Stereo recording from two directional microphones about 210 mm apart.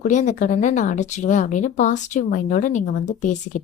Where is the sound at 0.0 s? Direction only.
35° left (ahead or behind).